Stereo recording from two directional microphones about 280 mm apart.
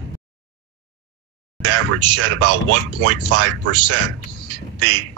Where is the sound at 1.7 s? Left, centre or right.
Right.